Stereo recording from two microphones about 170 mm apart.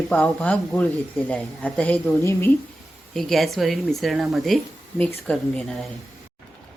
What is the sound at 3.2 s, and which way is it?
A woman's voice, centre (ahead or behind).